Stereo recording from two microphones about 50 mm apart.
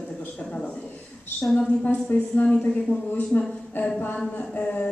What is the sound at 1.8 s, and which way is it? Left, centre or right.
A woman's voice, left.